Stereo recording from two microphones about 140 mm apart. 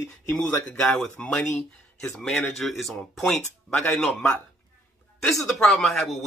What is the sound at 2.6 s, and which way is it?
Speech, centre (ahead or behind).